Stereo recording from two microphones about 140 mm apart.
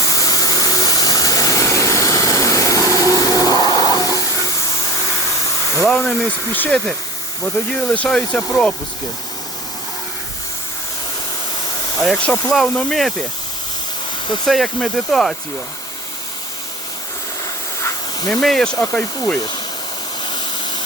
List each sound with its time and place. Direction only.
0.1 s a sound: 25° left (ahead or behind)
2.9 s vacuum cleaner: 20° right (ahead or behind)
3.4 s a sound: 30° left (ahead or behind)
5.9 s speech: 5° left (ahead or behind)
11.9 s speech: centre (ahead or behind)
14.4 s speech: centre (ahead or behind)
17.7 s hiss: 20° left (ahead or behind)
18.3 s speech: 5° left (ahead or behind)